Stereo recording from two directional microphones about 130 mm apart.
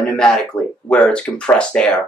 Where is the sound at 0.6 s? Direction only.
10° left (ahead or behind).